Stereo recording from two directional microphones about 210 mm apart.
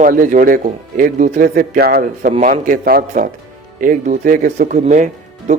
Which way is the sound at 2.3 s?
35° right (ahead or behind).